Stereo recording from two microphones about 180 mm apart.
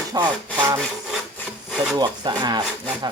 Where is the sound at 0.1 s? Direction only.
20° right (ahead or behind).